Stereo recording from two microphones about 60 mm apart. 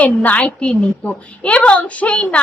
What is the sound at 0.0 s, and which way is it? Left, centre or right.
A child's voice, left.